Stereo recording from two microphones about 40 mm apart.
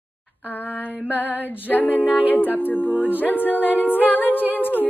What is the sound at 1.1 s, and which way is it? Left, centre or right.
A capella, left.